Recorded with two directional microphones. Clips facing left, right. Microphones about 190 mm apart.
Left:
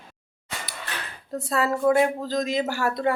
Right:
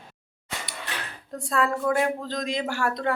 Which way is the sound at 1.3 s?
5° left (ahead or behind).